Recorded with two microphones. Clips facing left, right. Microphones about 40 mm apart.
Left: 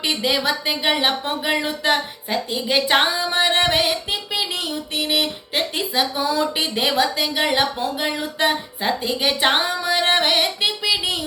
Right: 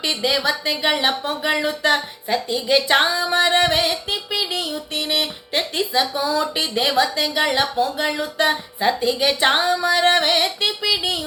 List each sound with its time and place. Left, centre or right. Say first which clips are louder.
0.2 s speech: even; centre
0.9 s music: even; left
2.3 s speech: right 2 dB; centre
3.0 s music: right 1 dB; left
6.4 s speech: even; centre
7.5 s music: right 1 dB; left
8.8 s speech: right 4 dB; centre
9.6 s music: right 3 dB; left